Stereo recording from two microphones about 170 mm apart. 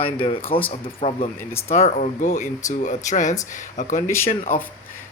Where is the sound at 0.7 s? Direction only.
35° left (ahead or behind).